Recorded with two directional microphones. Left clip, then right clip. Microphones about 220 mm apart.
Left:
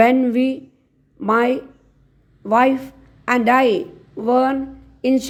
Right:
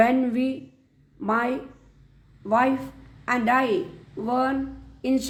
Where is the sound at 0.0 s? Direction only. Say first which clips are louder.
Left 6 dB; 30° left (ahead or behind).